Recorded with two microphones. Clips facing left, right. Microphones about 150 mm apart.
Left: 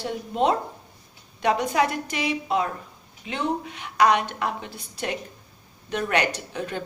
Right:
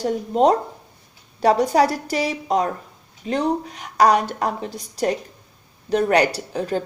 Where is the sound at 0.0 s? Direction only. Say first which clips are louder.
Right 6 dB; 40° right (ahead or behind).